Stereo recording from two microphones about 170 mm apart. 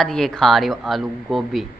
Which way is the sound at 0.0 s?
5° left (ahead or behind).